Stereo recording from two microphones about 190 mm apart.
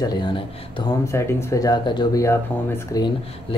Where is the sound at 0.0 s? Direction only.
20° left (ahead or behind).